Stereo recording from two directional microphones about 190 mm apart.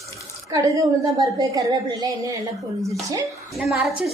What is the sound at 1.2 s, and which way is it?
A woman's voice, 20° right (ahead or behind).